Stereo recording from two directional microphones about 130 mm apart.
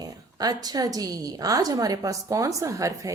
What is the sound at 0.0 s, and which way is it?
A woman's voice, 30° right (ahead or behind).